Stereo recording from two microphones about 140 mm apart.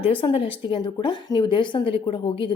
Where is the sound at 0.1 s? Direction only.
40° left (ahead or behind).